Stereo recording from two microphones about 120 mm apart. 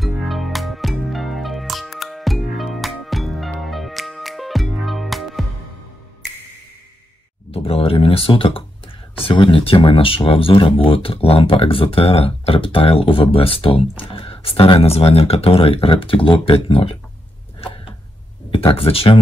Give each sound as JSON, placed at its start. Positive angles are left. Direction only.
{"t": 0.0, "sound": "music", "side_deg": 0}
{"t": 7.5, "sound": "speech", "side_deg": 55}
{"t": 18.5, "sound": "speech", "side_deg": 50}